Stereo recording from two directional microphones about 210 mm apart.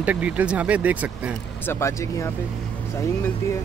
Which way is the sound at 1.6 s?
10° left (ahead or behind).